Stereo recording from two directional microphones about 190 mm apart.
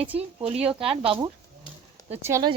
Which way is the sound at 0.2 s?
30° right (ahead or behind).